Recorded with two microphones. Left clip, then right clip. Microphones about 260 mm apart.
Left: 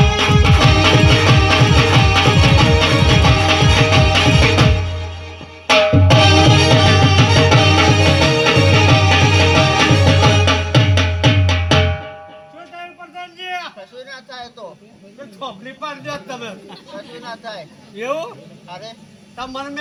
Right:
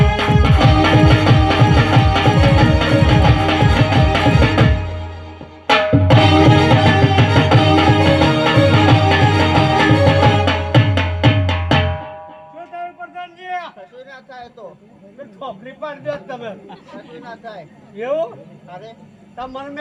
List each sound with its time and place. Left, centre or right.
0.1 s music: right
13.1 s a sound: left
15.4 s a sound: centre
17.2 s vehicle: centre
18.0 s vehicle: centre
19.4 s vehicle: centre